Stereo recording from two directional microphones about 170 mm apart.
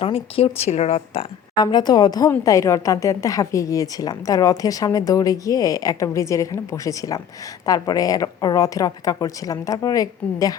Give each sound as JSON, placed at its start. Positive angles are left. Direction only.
{"t": 0.0, "sound": "a woman's voice", "side_deg": 35}